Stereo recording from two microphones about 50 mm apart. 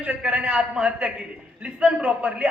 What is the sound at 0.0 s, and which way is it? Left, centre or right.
A man's voice, right.